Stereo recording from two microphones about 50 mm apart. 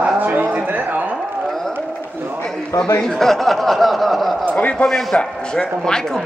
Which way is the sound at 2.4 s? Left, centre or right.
Centre.